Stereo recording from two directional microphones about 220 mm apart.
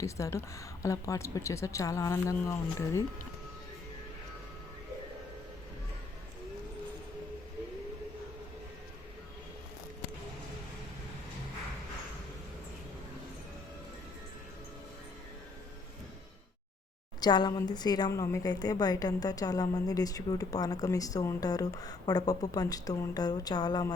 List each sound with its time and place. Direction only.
0.0 s a woman's voice: 15° left (ahead or behind)
17.2 s a woman's voice: 20° left (ahead or behind)